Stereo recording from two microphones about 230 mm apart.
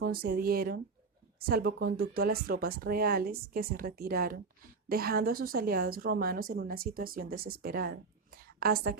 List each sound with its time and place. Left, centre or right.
0.0 s a woman's voice: right